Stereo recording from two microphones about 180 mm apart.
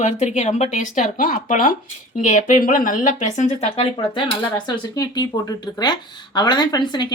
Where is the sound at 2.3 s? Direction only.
45° left (ahead or behind); by 7.1 s 25° left (ahead or behind).